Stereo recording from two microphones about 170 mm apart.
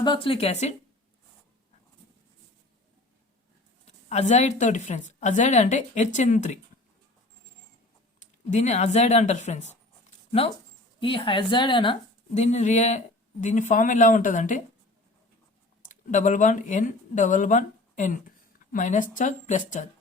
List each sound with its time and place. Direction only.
0.0 s a woman's voice: 30° left (ahead or behind)
4.1 s a woman's voice: 40° left (ahead or behind)
8.2 s a woman's voice: 45° left (ahead or behind)
11.0 s a woman's voice: 30° left (ahead or behind)
12.3 s a woman's voice: 40° left (ahead or behind)
15.8 s a woman's voice: 50° left (ahead or behind)